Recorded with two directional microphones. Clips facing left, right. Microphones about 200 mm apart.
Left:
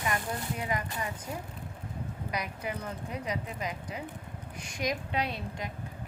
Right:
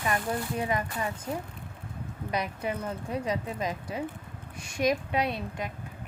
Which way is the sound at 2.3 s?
25° right (ahead or behind).